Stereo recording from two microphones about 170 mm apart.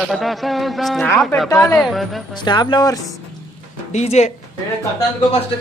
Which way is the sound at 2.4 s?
25° left (ahead or behind).